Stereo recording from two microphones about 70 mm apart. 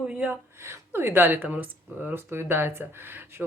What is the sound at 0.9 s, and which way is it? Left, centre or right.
Speech, right.